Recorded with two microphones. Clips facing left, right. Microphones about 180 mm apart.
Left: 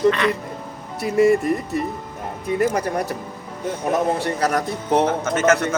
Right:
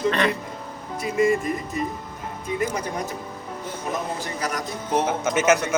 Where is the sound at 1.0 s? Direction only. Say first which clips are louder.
Left 5 dB; 60° left (ahead or behind).